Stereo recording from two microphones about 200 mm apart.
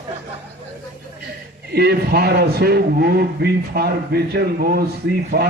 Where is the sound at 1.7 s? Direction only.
50° right (ahead or behind).